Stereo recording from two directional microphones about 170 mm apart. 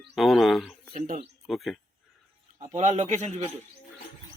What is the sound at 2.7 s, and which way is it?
Speech, 45° right (ahead or behind).